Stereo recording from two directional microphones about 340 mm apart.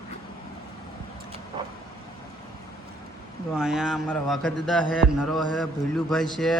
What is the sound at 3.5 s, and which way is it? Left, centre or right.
Speech, centre.